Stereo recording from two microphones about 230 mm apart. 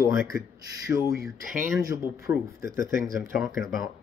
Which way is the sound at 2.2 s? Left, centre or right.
Left.